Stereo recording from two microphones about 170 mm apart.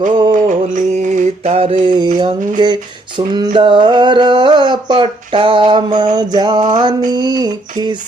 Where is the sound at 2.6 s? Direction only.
25° right (ahead or behind).